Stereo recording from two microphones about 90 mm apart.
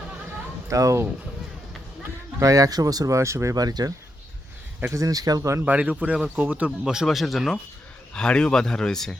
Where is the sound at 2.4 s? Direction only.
40° right (ahead or behind).